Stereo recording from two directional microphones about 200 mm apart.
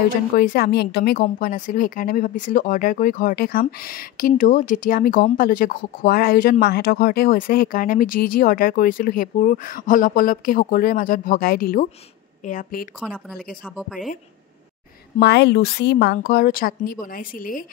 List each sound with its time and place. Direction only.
0.4 s speech: 50° left (ahead or behind)
1.2 s speech: 45° left (ahead or behind)
13.0 s speech: 5° right (ahead or behind)
15.1 s speech: 60° left (ahead or behind)